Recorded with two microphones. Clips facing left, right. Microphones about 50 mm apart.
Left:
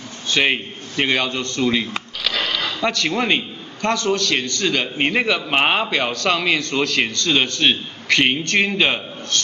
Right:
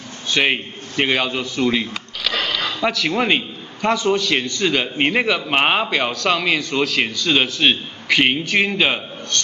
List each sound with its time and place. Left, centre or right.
0.3 s a man's voice: centre